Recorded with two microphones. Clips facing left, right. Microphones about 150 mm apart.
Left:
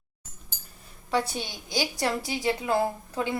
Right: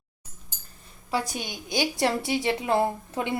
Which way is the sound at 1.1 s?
10° right (ahead or behind).